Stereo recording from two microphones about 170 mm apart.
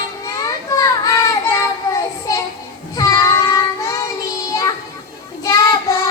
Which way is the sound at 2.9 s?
20° left (ahead or behind).